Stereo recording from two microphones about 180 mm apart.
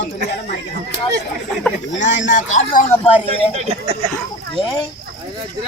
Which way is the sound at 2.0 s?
45° left (ahead or behind).